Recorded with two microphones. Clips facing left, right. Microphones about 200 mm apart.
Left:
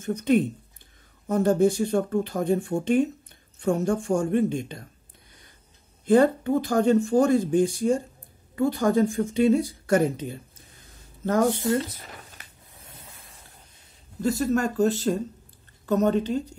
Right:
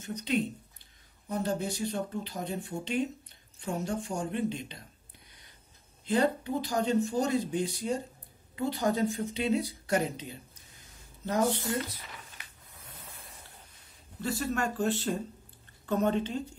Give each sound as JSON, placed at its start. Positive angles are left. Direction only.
{"t": 0.0, "sound": "speech", "side_deg": 50}
{"t": 6.0, "sound": "speech", "side_deg": 50}
{"t": 11.6, "sound": "speech", "side_deg": 25}
{"t": 11.9, "sound": "speech", "side_deg": 50}
{"t": 14.2, "sound": "speech", "side_deg": 40}